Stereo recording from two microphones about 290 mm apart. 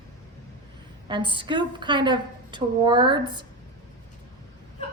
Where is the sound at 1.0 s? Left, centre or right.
Centre.